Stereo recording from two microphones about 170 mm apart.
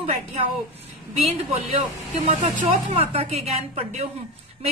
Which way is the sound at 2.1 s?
40° right (ahead or behind).